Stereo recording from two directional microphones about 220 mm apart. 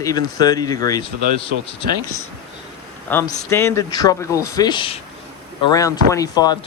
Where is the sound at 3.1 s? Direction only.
10° left (ahead or behind).